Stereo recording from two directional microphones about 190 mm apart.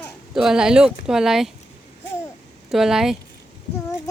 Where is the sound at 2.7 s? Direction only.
Centre (ahead or behind).